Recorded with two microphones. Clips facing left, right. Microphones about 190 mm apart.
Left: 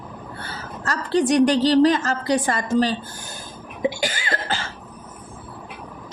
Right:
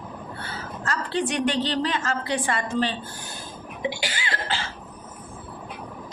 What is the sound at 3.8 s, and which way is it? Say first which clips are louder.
Cough: left 6 dB; 45° left (ahead or behind).